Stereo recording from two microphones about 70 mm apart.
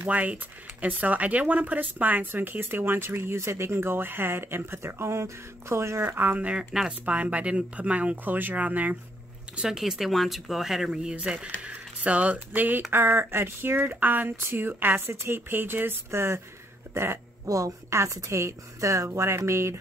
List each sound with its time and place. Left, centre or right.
0.0 s speech: right
6.0 s speech: right
9.6 s a woman's voice: centre; by 19.8 s right